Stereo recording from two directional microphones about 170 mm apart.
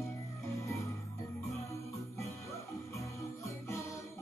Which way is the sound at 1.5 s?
15° left (ahead or behind).